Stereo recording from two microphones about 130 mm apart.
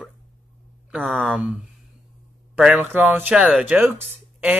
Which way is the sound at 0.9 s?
5° right (ahead or behind).